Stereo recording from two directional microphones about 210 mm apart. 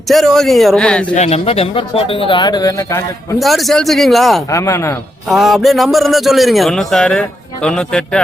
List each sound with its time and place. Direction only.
0.1 s a man's voice: centre (ahead or behind)
1.1 s speech: 30° left (ahead or behind); by 3.0 s 15° left (ahead or behind)
3.3 s a man's voice: centre (ahead or behind)
4.4 s a man's voice: 15° left (ahead or behind)
5.3 s a man's voice: centre (ahead or behind)